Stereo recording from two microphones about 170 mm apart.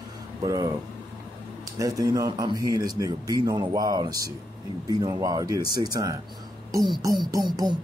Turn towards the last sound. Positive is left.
turn(degrees=-25)  # may be behind; listen again after turning